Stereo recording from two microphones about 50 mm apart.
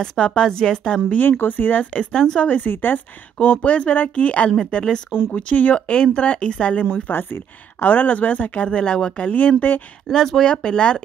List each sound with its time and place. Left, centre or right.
0.0 s a woman's voice: centre
1.1 s speech: left
2.1 s a woman's voice: centre
2.4 s speech: left
3.3 s a woman's voice: left
6.9 s speech: left
10.0 s a woman's voice: centre